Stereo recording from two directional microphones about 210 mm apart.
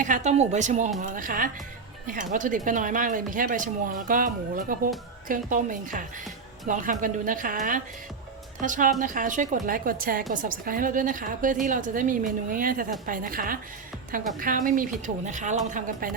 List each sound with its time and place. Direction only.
0.0 s a woman's voice: 35° right (ahead or behind)